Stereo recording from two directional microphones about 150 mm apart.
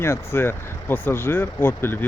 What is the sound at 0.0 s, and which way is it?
Speech, 15° left (ahead or behind).